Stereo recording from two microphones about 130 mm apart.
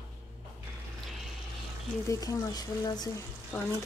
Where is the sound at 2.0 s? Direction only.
25° left (ahead or behind).